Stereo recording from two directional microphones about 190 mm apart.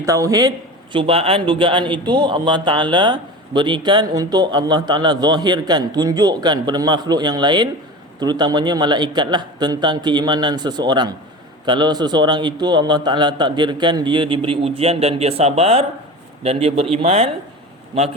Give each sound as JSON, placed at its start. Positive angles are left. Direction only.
{"t": 0.0, "sound": "a man's voice", "side_deg": -15}
{"t": 0.9, "sound": "a man's voice", "side_deg": -30}